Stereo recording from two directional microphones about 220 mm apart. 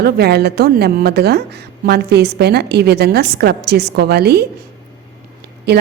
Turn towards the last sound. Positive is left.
turn(degrees=-45)  # may be behind; listen again after turning